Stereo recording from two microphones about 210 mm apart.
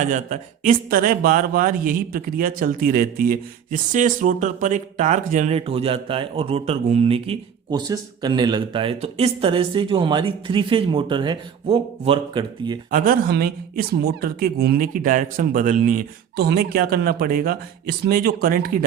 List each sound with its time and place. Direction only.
0.0 s speech: 35° right (ahead or behind); by 12.8 s 20° right (ahead or behind)
12.9 s speech: 40° right (ahead or behind)